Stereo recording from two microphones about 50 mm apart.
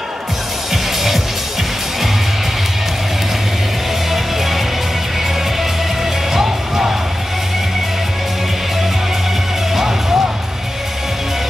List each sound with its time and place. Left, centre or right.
6.3 s music: centre
9.8 s music: centre